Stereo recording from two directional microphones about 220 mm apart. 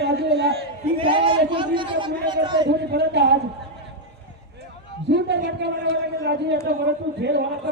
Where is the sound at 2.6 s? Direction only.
50° right (ahead or behind).